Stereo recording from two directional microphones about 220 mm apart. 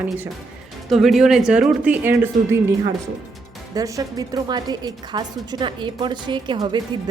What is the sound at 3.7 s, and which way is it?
Speech, 15° right (ahead or behind).